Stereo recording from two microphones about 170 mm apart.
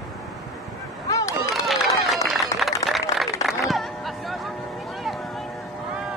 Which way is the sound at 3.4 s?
Centre (ahead or behind).